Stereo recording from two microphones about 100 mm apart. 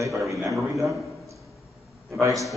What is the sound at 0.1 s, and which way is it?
Speech, centre (ahead or behind).